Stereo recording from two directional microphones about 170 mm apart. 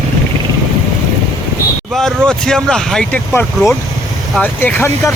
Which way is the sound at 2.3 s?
5° left (ahead or behind).